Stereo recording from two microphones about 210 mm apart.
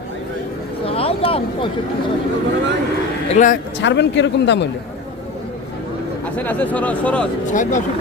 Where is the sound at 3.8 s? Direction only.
55° left (ahead or behind).